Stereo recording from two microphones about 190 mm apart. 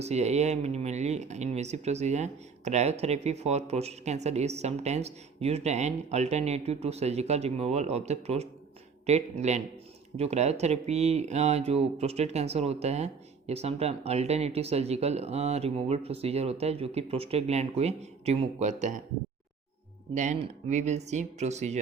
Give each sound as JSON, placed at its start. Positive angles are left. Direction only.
{"t": 0.0, "sound": "speech", "side_deg": -35}
{"t": 20.1, "sound": "speech", "side_deg": -40}